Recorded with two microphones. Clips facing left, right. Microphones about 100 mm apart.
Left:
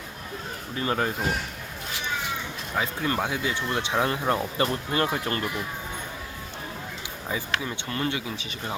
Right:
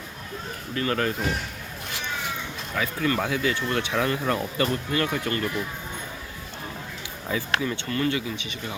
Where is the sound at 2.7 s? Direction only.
25° left (ahead or behind).